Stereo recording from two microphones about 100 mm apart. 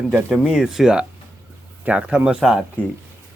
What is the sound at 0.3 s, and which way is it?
Speech, 5° left (ahead or behind).